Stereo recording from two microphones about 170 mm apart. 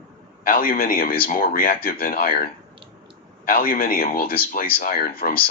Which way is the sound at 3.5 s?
60° left (ahead or behind).